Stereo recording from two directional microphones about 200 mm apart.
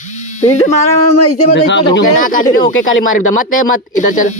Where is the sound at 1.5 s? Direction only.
60° left (ahead or behind).